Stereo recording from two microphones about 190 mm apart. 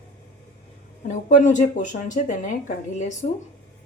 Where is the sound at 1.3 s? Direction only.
40° left (ahead or behind).